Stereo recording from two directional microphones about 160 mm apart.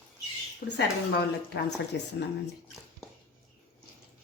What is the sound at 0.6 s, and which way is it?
Speech, 75° left (ahead or behind).